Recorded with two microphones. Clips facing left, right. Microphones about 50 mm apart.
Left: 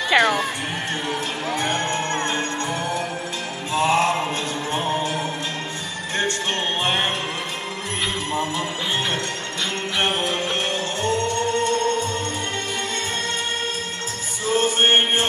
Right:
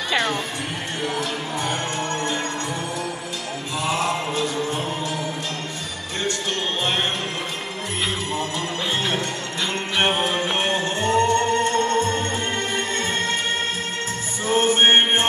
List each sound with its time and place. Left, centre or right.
0.1 s music: left
1.6 s music: left
3.7 s music: left
9.9 s music: right
14.4 s music: right